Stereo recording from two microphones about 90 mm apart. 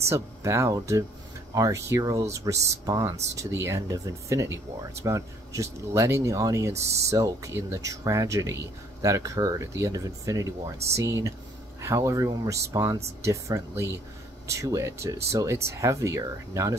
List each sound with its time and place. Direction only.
0.1 s speech: 30° right (ahead or behind)